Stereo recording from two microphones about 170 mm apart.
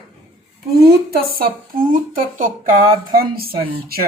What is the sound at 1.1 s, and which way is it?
A woman's voice, 55° right (ahead or behind).